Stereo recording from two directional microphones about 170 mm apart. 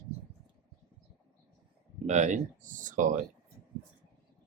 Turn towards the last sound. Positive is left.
turn(degrees=-50)  # may be behind; listen again after turning